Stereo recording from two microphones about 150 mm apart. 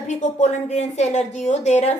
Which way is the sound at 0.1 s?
50° left (ahead or behind).